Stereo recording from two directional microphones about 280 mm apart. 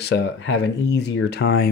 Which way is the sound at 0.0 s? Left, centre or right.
Left.